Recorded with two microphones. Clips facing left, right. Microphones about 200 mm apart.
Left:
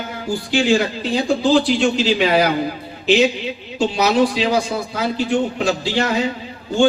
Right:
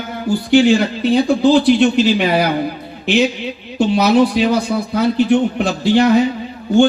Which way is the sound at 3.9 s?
60° right (ahead or behind).